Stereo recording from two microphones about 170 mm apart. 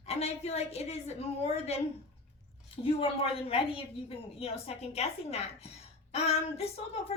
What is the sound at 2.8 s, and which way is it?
Speech, 35° left (ahead or behind).